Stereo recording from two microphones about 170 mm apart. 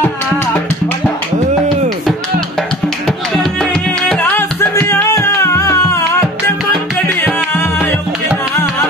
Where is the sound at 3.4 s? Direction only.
5° left (ahead or behind).